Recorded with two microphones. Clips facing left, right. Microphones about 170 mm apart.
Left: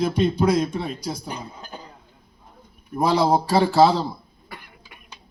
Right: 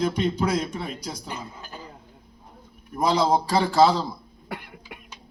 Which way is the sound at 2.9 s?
10° left (ahead or behind).